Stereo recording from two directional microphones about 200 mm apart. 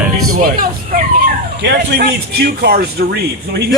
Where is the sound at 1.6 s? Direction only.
55° right (ahead or behind).